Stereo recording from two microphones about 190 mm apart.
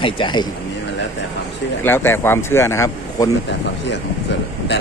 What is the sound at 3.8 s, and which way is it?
Speech, 65° left (ahead or behind).